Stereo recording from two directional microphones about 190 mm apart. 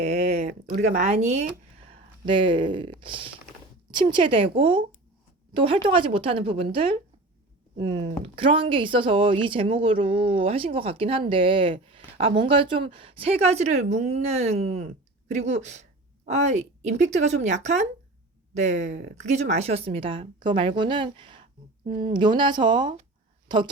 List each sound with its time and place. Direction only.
0.0 s speech: 35° right (ahead or behind)
2.2 s a woman's voice: 25° right (ahead or behind)
7.9 s a woman's voice: 25° right (ahead or behind)